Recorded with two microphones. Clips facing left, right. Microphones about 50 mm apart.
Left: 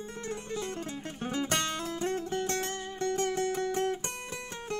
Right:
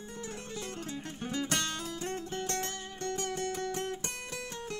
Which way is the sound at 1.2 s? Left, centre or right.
Left.